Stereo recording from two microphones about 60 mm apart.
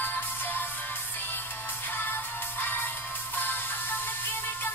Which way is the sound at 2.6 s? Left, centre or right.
Left.